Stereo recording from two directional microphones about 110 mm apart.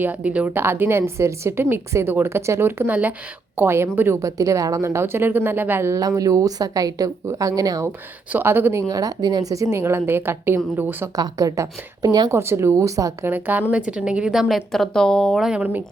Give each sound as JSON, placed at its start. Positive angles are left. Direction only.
{"t": 0.0, "sound": "a woman's voice", "side_deg": -15}
{"t": 8.3, "sound": "a woman's voice", "side_deg": -20}
{"t": 8.9, "sound": "a woman's voice", "side_deg": -35}
{"t": 11.2, "sound": "a woman's voice", "side_deg": -35}
{"t": 12.4, "sound": "a woman's voice", "side_deg": -25}
{"t": 13.3, "sound": "a woman's voice", "side_deg": -15}